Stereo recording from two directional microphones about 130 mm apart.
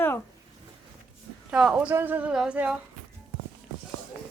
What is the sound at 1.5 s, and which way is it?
A woman's voice, 5° right (ahead or behind).